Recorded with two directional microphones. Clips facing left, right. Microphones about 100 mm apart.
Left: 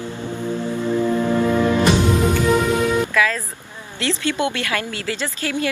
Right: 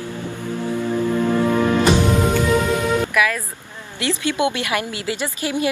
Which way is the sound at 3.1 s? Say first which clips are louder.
Even; 15° right (ahead or behind).